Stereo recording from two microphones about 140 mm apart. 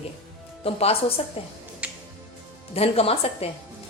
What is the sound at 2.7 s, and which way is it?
Speech, 45° left (ahead or behind).